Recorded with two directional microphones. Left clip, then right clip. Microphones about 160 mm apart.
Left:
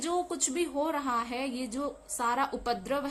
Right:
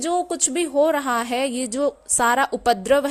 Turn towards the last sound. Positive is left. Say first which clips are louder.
# right 13 dB
turn(degrees=-50)  # may be behind; listen again after turning